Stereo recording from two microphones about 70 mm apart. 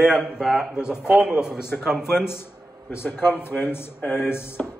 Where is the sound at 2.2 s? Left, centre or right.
Left.